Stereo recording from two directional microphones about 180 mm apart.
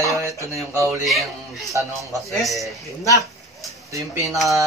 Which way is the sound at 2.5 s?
15° left (ahead or behind).